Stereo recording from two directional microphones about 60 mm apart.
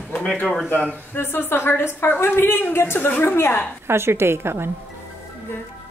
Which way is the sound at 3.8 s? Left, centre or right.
Right.